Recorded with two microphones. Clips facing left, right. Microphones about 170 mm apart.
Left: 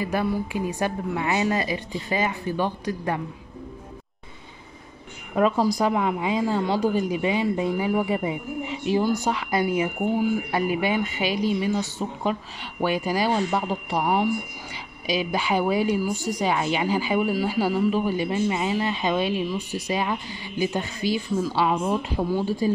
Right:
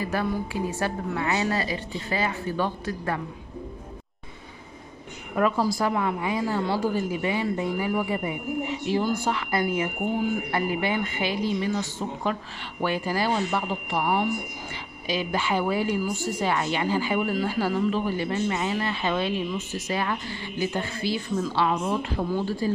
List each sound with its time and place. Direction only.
0.0 s speech: 15° left (ahead or behind)
5.3 s a woman's voice: 20° left (ahead or behind)